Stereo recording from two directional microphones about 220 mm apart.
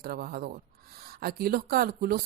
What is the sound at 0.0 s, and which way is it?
A woman's voice, 40° right (ahead or behind).